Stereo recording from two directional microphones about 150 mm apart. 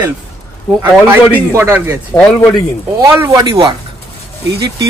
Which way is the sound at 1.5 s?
15° right (ahead or behind).